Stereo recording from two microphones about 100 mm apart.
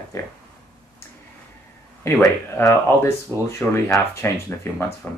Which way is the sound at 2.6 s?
30° left (ahead or behind).